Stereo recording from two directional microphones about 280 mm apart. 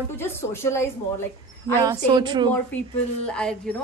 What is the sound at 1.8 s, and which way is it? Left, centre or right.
Speech, centre.